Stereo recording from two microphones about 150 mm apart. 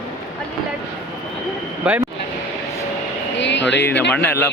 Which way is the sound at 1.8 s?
10° right (ahead or behind).